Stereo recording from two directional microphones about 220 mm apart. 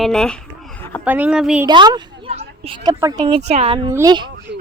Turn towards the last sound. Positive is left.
turn(degrees=-20)  # may be behind; listen again after turning